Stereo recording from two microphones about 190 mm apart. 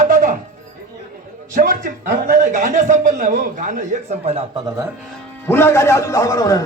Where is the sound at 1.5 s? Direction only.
40° right (ahead or behind).